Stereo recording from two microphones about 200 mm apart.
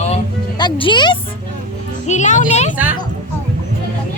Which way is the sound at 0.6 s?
25° left (ahead or behind).